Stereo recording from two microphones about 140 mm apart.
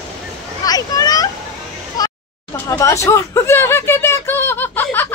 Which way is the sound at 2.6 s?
25° left (ahead or behind).